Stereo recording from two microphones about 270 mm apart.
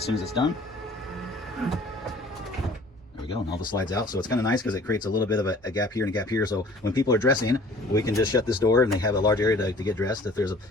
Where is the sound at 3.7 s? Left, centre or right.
Centre.